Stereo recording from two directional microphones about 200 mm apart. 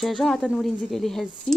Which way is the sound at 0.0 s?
Centre (ahead or behind).